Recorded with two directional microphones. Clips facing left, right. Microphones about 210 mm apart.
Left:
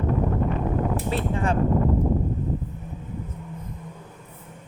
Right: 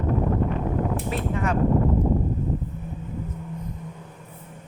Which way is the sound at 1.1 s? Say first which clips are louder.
Left 1 dB; 30° left (ahead or behind).